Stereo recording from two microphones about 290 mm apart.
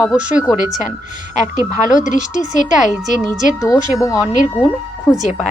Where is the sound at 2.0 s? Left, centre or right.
Left.